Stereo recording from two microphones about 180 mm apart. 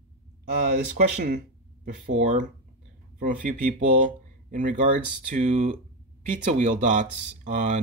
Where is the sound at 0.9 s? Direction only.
55° right (ahead or behind).